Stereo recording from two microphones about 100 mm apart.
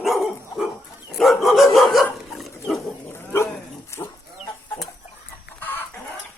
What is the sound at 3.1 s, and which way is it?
Dog, 25° left (ahead or behind).